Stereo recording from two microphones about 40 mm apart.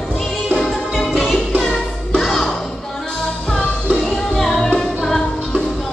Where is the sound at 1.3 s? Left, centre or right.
Left.